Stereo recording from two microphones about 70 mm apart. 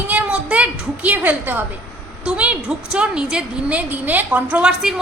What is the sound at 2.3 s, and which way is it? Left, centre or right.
A woman's voice, centre.